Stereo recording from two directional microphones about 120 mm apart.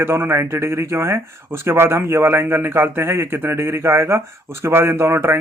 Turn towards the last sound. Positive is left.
turn(degrees=-20)  # may be behind; listen again after turning